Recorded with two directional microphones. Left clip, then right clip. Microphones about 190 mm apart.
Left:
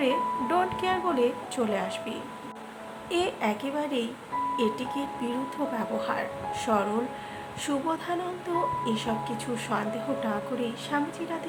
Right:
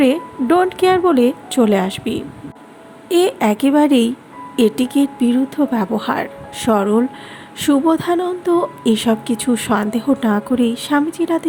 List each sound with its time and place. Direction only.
0.0 s a woman's voice: 40° right (ahead or behind)